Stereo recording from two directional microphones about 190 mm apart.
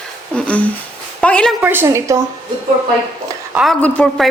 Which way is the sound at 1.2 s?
5° left (ahead or behind).